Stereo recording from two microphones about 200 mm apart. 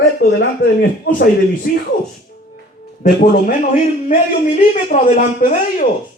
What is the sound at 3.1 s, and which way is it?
A man's voice, 50° left (ahead or behind).